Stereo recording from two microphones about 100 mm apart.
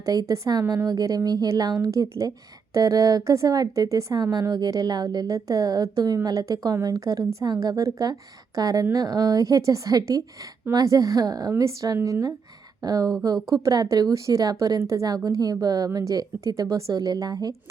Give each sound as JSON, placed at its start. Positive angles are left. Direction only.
{"t": 0.0, "sound": "speech", "side_deg": -35}
{"t": 11.9, "sound": "speech", "side_deg": -20}
{"t": 12.8, "sound": "speech", "side_deg": -40}